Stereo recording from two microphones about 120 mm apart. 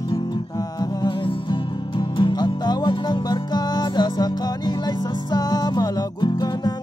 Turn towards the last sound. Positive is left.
turn(degrees=35)  # may be behind; listen again after turning